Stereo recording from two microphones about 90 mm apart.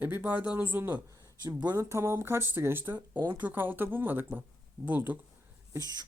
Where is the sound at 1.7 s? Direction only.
30° right (ahead or behind).